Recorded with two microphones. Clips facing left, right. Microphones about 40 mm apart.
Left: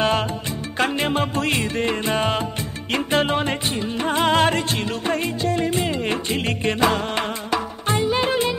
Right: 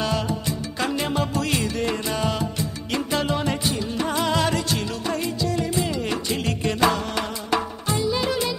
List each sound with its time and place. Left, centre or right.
0.7 s music: left